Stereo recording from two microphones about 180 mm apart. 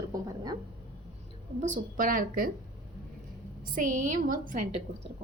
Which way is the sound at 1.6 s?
45° right (ahead or behind).